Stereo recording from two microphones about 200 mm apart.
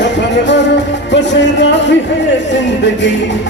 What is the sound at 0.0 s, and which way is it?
Music, 60° left (ahead or behind).